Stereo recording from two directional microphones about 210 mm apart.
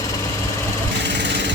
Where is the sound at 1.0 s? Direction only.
55° right (ahead or behind).